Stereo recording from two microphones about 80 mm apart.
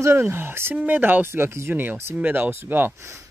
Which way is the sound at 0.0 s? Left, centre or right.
Right.